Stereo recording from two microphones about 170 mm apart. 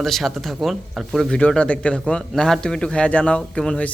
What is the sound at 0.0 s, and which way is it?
Speech, centre (ahead or behind).